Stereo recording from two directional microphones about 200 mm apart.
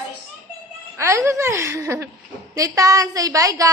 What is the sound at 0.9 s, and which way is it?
A woman's voice, 15° right (ahead or behind).